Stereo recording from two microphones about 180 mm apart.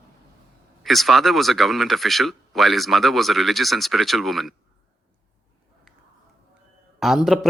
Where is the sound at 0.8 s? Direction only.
Centre (ahead or behind).